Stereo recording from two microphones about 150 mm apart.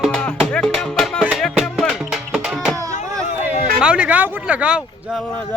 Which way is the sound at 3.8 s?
5° right (ahead or behind).